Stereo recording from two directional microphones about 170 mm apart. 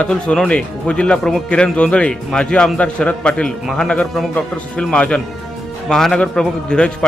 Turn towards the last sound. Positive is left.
turn(degrees=5)  # may be behind; listen again after turning